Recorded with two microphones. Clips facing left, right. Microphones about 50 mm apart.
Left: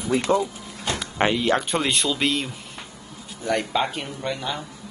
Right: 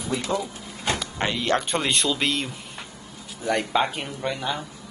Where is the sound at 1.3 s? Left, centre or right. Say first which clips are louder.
Left 2 dB; centre.